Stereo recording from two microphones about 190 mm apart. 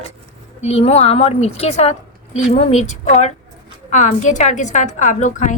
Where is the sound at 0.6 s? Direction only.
35° left (ahead or behind).